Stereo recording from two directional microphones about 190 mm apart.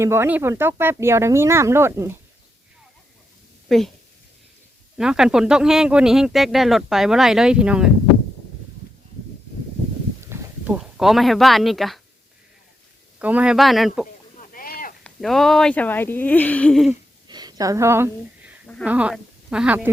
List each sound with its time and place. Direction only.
0.0 s speech: 15° right (ahead or behind)
3.7 s a woman's voice: centre (ahead or behind)
4.9 s speech: 5° right (ahead or behind)
10.2 s speech: 5° right (ahead or behind)
13.1 s speech: 5° right (ahead or behind)
14.3 s a sound: 50° left (ahead or behind)
15.0 s speech: centre (ahead or behind)
17.2 s a sound: 20° right (ahead or behind)
18.9 s speech: 5° right (ahead or behind)